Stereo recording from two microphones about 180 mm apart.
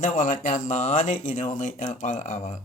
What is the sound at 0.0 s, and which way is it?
Speech, 45° left (ahead or behind).